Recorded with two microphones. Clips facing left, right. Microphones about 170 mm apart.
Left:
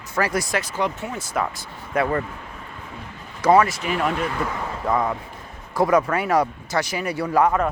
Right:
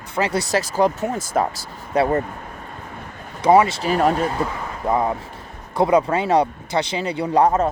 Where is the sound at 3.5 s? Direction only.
25° right (ahead or behind).